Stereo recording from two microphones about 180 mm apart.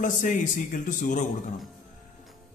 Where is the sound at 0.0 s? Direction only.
45° left (ahead or behind).